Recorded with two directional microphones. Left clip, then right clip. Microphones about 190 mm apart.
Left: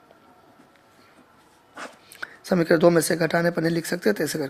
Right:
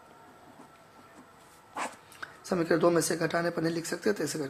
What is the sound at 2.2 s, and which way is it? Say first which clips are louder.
Speech: left 7 dB; 35° left (ahead or behind).